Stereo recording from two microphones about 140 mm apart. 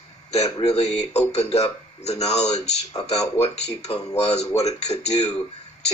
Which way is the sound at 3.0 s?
25° left (ahead or behind).